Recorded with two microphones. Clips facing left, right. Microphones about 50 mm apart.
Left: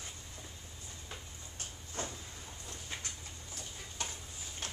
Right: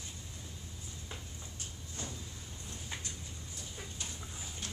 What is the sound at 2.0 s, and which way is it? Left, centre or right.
Vehicle, left.